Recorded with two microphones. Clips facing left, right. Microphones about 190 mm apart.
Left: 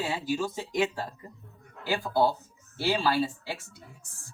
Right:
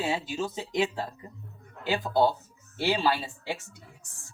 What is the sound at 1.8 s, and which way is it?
Speech, 20° right (ahead or behind).